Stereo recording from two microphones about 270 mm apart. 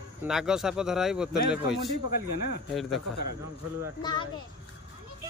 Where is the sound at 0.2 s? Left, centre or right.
Centre.